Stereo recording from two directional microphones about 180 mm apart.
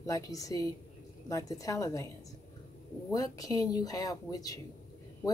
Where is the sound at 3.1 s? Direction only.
20° left (ahead or behind).